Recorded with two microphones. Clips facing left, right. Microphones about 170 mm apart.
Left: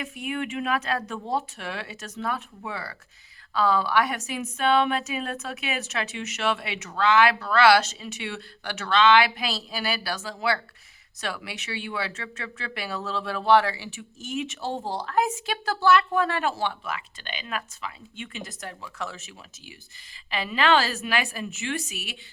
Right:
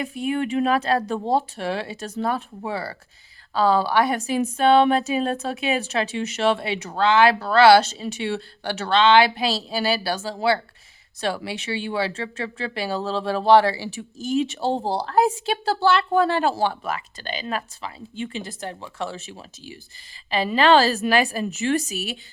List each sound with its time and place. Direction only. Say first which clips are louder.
0.0 s speech: right 6 dB; 35° right (ahead or behind)